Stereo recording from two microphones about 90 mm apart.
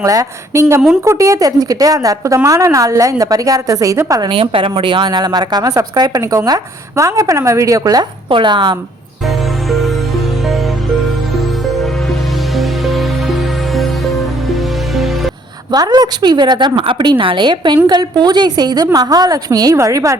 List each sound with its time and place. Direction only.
0.0 s a woman's voice: 40° right (ahead or behind)
4.3 s speech: 90° right; by 5.0 s 65° right (ahead or behind)
5.0 s speech: 50° right (ahead or behind)
8.3 s a woman's voice: 60° right (ahead or behind)
9.2 s music: centre (ahead or behind)
15.7 s a woman's voice: 45° right (ahead or behind)